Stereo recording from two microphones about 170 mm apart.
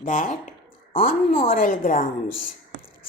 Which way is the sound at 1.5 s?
55° left (ahead or behind).